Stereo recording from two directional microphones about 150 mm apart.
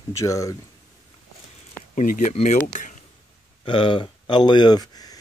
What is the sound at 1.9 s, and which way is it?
Speech, 60° left (ahead or behind).